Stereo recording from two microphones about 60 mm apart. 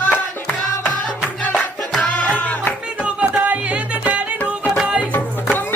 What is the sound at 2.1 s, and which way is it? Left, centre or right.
Music, left.